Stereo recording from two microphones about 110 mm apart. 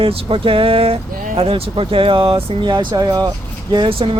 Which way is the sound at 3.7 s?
50° right (ahead or behind).